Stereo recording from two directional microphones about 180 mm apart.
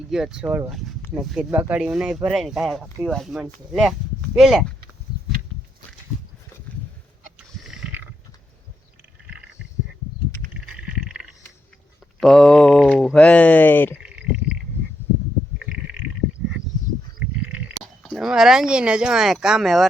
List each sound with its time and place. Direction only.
0.1 s speech: 5° right (ahead or behind)
6.7 s a sound: 10° left (ahead or behind)
7.6 s mechanisms: 5° right (ahead or behind)
10.8 s a sound: 5° right (ahead or behind)
12.2 s speech: centre (ahead or behind)
18.0 s speech: centre (ahead or behind)